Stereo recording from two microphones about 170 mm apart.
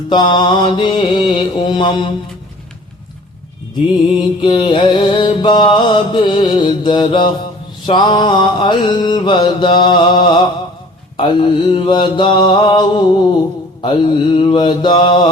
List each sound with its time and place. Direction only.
0.1 s mantra: 25° left (ahead or behind)
4.4 s mantra: 30° left (ahead or behind)